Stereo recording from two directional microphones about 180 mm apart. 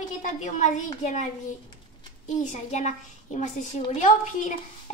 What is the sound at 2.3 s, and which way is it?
A woman's voice, 40° left (ahead or behind).